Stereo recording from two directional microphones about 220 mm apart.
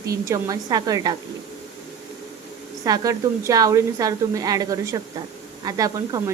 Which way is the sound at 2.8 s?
15° right (ahead or behind).